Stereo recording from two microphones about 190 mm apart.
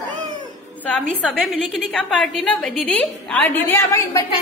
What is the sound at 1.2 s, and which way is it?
A woman's voice, 5° left (ahead or behind).